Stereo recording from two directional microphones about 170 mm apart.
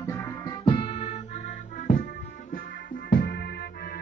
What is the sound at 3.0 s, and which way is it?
Music, 60° left (ahead or behind).